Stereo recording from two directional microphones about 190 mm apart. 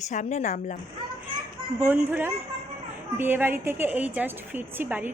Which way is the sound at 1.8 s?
10° right (ahead or behind).